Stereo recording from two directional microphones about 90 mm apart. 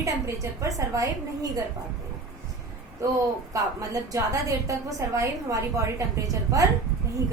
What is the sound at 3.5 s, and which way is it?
A woman's voice, 40° right (ahead or behind).